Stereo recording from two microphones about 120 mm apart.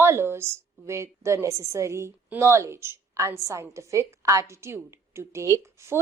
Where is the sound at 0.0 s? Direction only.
20° right (ahead or behind).